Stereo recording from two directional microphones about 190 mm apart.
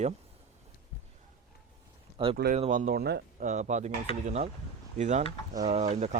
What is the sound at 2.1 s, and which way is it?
Speech, 30° right (ahead or behind).